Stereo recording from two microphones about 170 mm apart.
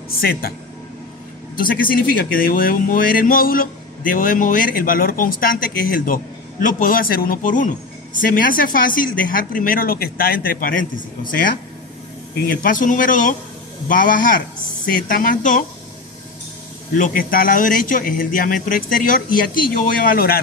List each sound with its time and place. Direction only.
0.1 s speech: 60° left (ahead or behind)
1.6 s speech: 55° left (ahead or behind)
16.9 s speech: 50° left (ahead or behind)